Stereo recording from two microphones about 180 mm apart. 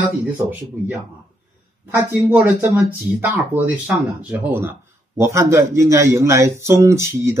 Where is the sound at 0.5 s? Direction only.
10° right (ahead or behind).